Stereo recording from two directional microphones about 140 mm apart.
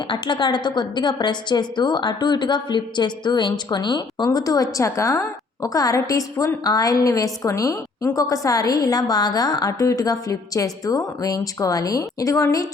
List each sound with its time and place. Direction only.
0.1 s a woman's voice: 35° left (ahead or behind)